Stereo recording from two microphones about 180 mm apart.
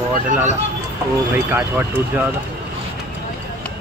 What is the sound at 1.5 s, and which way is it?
Speech, 10° right (ahead or behind).